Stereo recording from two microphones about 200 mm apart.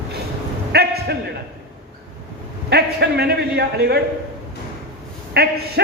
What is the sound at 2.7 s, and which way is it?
A man's voice, 55° right (ahead or behind).